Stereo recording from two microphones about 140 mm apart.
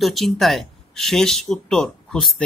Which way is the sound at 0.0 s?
Centre (ahead or behind).